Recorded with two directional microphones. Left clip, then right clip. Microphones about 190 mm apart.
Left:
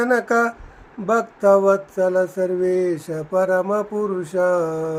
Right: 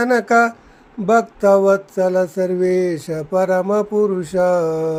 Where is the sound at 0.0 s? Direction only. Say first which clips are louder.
Right 4 dB; 40° right (ahead or behind).